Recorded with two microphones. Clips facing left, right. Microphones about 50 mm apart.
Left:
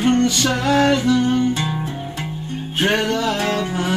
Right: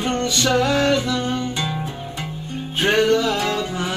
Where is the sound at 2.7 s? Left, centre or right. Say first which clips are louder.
Right 2 dB; left.